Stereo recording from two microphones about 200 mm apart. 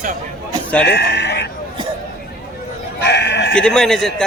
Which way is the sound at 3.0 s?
60° left (ahead or behind).